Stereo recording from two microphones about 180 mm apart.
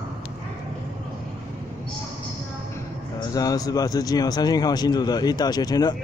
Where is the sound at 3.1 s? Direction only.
20° left (ahead or behind).